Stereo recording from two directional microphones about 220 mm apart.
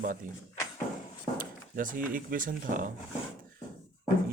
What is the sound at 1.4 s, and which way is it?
Speech, 40° right (ahead or behind).